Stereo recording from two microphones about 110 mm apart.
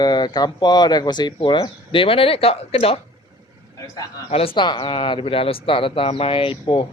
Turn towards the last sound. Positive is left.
turn(degrees=50)  # may be behind; listen again after turning